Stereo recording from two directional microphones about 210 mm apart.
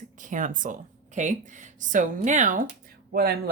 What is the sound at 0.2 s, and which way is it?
Speech, 40° right (ahead or behind).